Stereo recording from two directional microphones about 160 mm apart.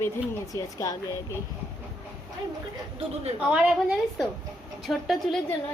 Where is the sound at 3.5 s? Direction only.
5° right (ahead or behind).